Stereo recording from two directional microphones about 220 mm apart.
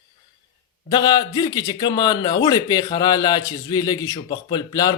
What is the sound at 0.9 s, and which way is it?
A man's voice, 20° left (ahead or behind).